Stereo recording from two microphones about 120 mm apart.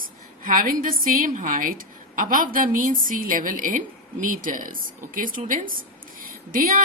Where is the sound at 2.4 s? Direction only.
90° right.